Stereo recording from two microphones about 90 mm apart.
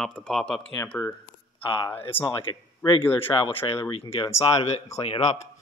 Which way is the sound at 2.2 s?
65° left (ahead or behind).